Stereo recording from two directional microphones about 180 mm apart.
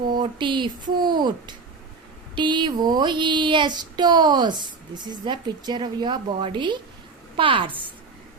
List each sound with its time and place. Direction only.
0.1 s child singing: 25° right (ahead or behind)